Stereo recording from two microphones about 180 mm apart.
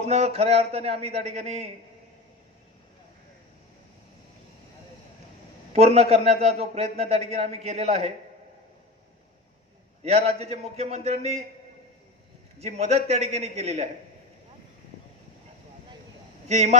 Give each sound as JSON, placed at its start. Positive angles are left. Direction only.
{"t": 0.0, "sound": "a man's voice", "side_deg": -35}
{"t": 5.7, "sound": "a man's voice", "side_deg": -35}
{"t": 10.0, "sound": "a man's voice", "side_deg": -35}
{"t": 12.5, "sound": "a man's voice", "side_deg": -35}
{"t": 16.5, "sound": "a man's voice", "side_deg": -40}